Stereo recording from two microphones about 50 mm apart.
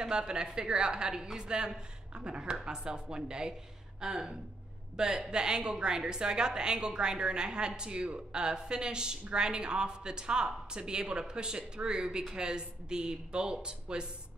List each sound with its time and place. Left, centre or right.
0.0 s speech: centre